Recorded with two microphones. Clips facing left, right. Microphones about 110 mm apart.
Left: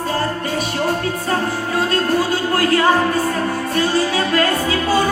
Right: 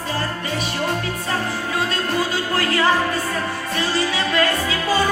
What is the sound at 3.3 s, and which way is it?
Music, 40° left (ahead or behind).